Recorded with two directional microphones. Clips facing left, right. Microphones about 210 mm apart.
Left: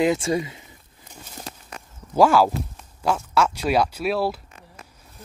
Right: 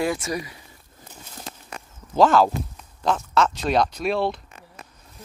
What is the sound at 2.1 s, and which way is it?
Speech, 10° left (ahead or behind).